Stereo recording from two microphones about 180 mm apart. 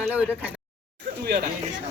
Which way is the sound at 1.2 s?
55° right (ahead or behind).